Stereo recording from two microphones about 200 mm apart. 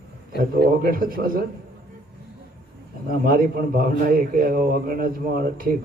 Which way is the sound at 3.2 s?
45° right (ahead or behind).